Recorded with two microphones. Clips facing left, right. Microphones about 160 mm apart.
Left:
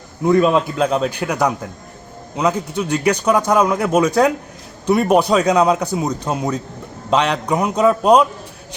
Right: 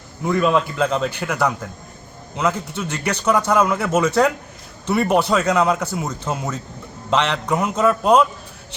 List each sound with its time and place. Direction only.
0.3 s a man's voice: 20° left (ahead or behind)